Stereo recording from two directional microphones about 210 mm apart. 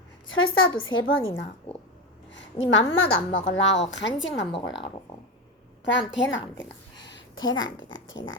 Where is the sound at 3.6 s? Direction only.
60° left (ahead or behind).